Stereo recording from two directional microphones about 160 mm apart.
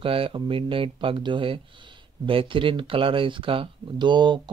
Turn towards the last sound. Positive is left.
turn(degrees=-30)  # may be behind; listen again after turning